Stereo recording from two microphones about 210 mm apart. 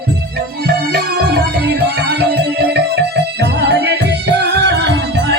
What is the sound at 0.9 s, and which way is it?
Music, 45° right (ahead or behind).